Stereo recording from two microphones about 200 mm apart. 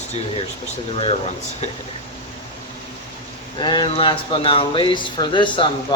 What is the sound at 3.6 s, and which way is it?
Speech, 20° left (ahead or behind).